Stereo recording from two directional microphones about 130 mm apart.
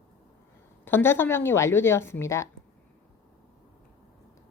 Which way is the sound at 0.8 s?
15° left (ahead or behind).